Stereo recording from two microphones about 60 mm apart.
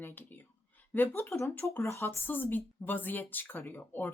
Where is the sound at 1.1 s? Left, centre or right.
Left.